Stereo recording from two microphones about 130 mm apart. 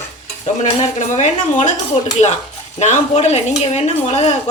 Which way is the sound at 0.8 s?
65° left (ahead or behind).